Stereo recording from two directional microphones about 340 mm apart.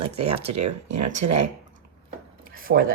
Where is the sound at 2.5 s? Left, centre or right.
Right.